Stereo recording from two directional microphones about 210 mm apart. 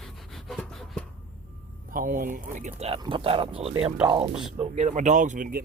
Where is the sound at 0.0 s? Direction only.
Centre (ahead or behind).